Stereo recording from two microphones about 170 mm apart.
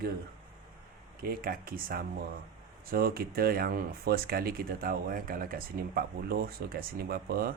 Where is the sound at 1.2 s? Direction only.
60° right (ahead or behind).